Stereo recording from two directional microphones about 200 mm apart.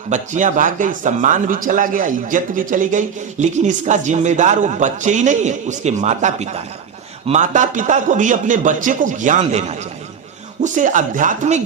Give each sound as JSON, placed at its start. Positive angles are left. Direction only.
{"t": 0.1, "sound": "a man's voice", "side_deg": -40}